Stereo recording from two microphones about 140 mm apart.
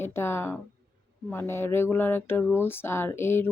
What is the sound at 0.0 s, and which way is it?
Speech, 15° left (ahead or behind).